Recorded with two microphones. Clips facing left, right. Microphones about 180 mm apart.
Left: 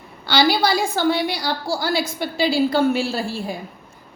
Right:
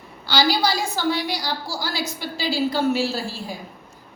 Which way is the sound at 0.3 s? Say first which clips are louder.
Left 3 dB; 60° left (ahead or behind).